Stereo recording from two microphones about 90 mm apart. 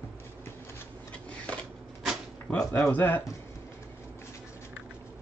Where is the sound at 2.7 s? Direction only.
20° left (ahead or behind).